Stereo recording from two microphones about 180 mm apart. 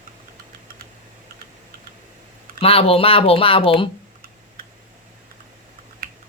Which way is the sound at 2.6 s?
30° left (ahead or behind).